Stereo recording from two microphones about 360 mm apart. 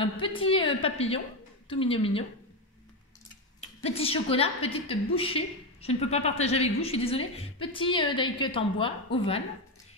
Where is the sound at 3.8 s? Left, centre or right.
Centre.